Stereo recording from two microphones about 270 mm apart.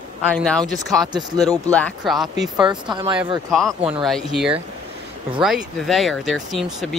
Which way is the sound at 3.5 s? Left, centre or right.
Centre.